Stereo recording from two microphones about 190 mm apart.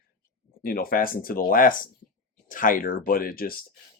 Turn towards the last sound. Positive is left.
turn(degrees=50)  # may be behind; listen again after turning